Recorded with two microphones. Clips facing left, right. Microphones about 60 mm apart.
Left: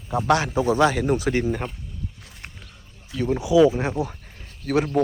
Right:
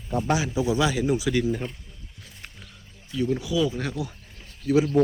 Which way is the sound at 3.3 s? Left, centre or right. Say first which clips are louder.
Left 10 dB; left.